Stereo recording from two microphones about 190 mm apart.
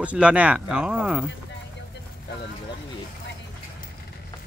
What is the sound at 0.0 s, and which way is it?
Speech, 5° right (ahead or behind).